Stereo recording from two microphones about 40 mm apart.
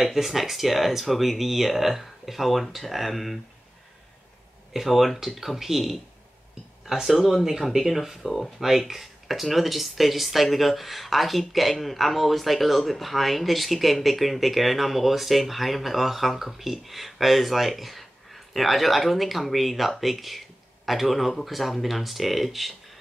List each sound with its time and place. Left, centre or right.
0.0 s speech: centre
4.7 s speech: centre